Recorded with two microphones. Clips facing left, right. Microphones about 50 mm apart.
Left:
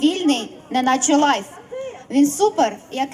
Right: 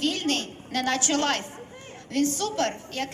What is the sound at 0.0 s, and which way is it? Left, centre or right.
A woman's voice, left.